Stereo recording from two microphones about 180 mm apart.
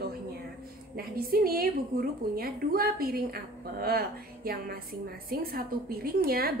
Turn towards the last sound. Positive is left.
turn(degrees=-55)  # may be behind; listen again after turning